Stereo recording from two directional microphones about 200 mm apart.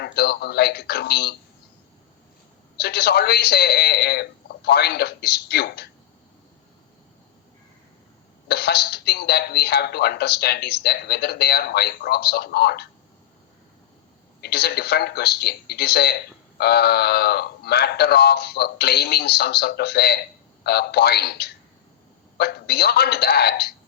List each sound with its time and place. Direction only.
0.0 s speech: 55° left (ahead or behind)
2.7 s speech: 55° left (ahead or behind)
8.4 s speech: 55° left (ahead or behind)
14.4 s speech: 55° left (ahead or behind)